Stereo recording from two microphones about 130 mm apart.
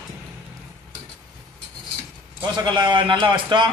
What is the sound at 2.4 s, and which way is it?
Speech, 35° right (ahead or behind).